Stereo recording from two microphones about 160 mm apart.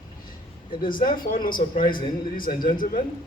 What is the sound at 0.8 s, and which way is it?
Speech, 60° left (ahead or behind).